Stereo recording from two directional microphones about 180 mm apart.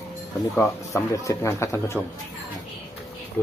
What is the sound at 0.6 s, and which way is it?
Speech, 15° left (ahead or behind).